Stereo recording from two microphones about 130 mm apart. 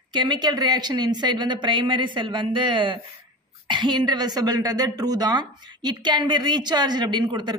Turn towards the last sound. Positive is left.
turn(degrees=-35)  # may be behind; listen again after turning